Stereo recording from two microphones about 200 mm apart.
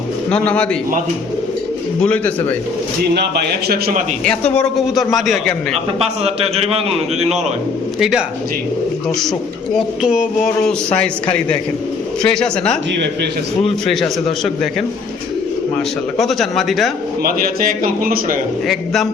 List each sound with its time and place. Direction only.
0.3 s a man's voice: 5° left (ahead or behind)
2.0 s speech: 5° left (ahead or behind)
3.7 s a man's voice: 50° right (ahead or behind)
4.2 s a man's voice: 5° left (ahead or behind)
6.2 s a man's voice: 30° right (ahead or behind)
7.9 s a man's voice: centre (ahead or behind)
9.7 s a man's voice: 5° right (ahead or behind)
13.8 s a man's voice: centre (ahead or behind)
16.1 s a man's voice: centre (ahead or behind)
17.2 s a man's voice: 45° right (ahead or behind)